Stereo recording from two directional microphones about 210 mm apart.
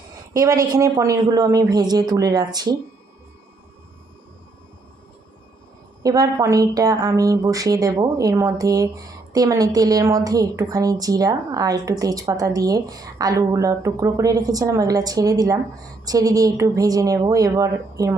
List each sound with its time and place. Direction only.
0.3 s a woman's voice: 15° right (ahead or behind)
6.0 s a woman's voice: 15° right (ahead or behind)